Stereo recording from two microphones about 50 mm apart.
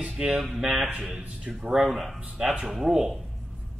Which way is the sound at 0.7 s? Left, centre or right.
Right.